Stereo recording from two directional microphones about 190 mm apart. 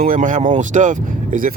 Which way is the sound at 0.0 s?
45° right (ahead or behind).